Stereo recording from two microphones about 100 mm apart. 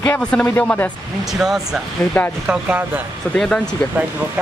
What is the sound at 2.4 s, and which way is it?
Speech, 15° right (ahead or behind).